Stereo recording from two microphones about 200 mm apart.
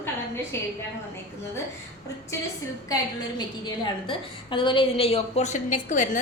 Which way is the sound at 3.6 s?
25° left (ahead or behind).